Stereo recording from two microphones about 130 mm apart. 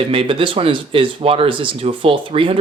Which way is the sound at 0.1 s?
45° right (ahead or behind).